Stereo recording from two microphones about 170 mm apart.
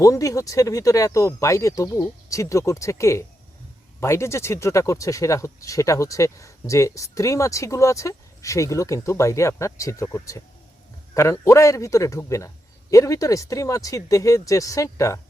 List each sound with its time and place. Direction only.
0.0 s speech: 20° left (ahead or behind)